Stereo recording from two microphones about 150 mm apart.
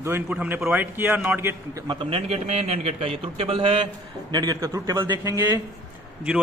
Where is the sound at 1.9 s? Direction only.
35° right (ahead or behind).